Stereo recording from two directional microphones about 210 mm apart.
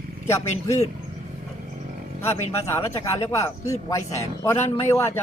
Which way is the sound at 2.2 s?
10° left (ahead or behind).